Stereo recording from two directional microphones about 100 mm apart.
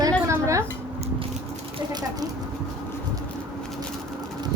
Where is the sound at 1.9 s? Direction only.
45° right (ahead or behind).